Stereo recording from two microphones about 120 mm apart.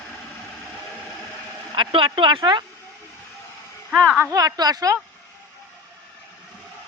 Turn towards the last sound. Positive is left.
turn(degrees=-30)  # may be behind; listen again after turning